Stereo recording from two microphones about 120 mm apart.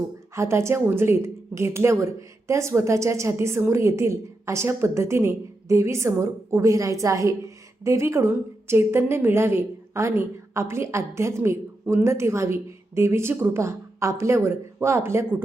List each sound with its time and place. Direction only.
0.3 s a woman's voice: 25° right (ahead or behind)